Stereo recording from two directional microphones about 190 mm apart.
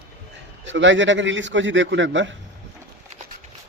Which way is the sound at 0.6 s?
75° right (ahead or behind).